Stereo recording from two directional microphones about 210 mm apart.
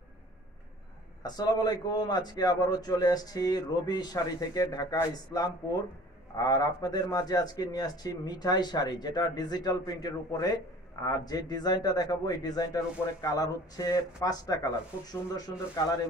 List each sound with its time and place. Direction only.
1.2 s a man's voice: 20° left (ahead or behind)